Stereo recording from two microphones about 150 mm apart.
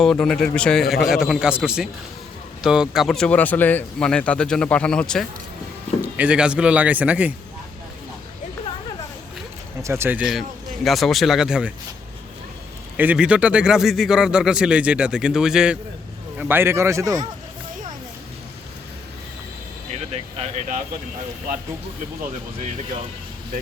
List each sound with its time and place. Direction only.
0.0 s a man's voice: 5° left (ahead or behind)
6.0 s speech: 10° right (ahead or behind)
9.8 s a man's voice: 15° right (ahead or behind)
13.0 s a man's voice: 10° right (ahead or behind)
19.9 s a sound: 40° right (ahead or behind)